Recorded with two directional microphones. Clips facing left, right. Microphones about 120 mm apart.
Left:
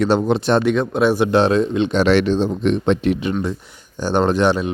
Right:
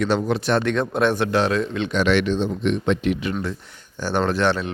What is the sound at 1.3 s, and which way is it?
Speech, 25° left (ahead or behind).